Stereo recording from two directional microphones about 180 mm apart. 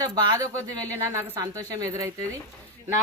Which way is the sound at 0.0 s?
25° right (ahead or behind).